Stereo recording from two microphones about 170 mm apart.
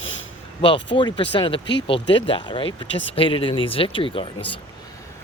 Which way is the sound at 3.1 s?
30° left (ahead or behind).